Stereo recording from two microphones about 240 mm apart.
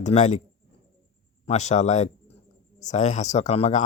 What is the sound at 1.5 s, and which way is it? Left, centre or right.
A man's voice, left.